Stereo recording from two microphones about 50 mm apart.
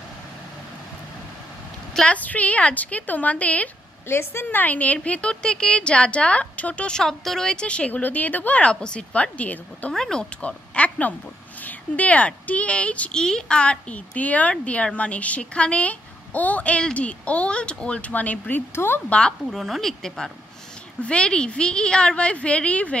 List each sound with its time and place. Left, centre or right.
2.0 s speech: left
4.1 s a woman's voice: left
4.6 s speech: left
7.0 s speech: centre; by 8.5 s left
8.5 s speech: left
9.9 s speech: centre
10.4 s speech: left
13.1 s speech: centre; by 18.6 s left
19.0 s speech: centre
19.4 s speech: centre
21.0 s speech: left